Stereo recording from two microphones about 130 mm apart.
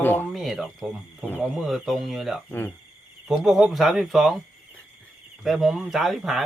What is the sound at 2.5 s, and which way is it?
Speech, 15° left (ahead or behind).